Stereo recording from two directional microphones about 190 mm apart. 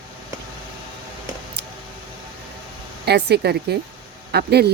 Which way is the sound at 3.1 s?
60° right (ahead or behind).